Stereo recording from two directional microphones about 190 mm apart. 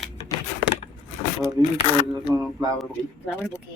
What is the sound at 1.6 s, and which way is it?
Speech, 20° right (ahead or behind).